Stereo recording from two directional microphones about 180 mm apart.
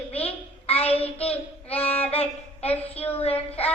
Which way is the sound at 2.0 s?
35° left (ahead or behind).